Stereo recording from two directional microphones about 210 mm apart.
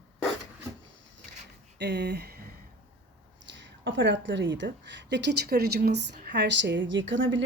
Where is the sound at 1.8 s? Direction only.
55° right (ahead or behind).